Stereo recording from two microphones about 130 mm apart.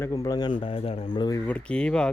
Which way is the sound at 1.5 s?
10° left (ahead or behind).